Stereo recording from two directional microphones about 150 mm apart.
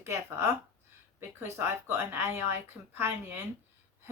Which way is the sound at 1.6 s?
15° right (ahead or behind).